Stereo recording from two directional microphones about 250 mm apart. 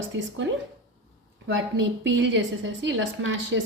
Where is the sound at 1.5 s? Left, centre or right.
Right.